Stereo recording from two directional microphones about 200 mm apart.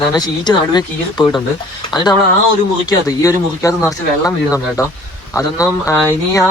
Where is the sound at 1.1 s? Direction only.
5° left (ahead or behind).